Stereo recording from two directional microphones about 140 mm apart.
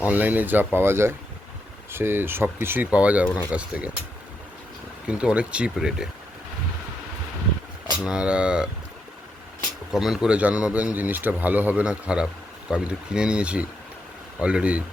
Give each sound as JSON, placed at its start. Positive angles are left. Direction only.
{"t": 0.0, "sound": "speech", "side_deg": -10}
{"t": 5.0, "sound": "speech", "side_deg": -10}
{"t": 8.0, "sound": "speech", "side_deg": -5}
{"t": 9.9, "sound": "speech", "side_deg": -5}